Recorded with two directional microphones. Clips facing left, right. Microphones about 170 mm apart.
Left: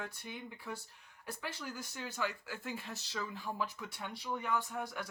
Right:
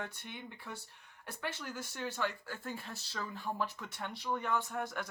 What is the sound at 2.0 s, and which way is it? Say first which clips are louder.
Speech: right 2 dB; 5° left (ahead or behind).